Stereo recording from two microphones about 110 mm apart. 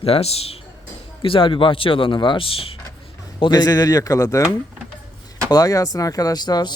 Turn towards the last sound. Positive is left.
turn(degrees=40)  # may be behind; listen again after turning